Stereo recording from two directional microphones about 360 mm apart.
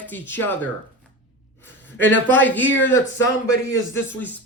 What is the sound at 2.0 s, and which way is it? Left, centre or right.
A man's voice, centre.